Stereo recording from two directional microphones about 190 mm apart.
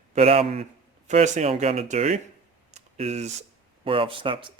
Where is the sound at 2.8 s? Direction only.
35° right (ahead or behind).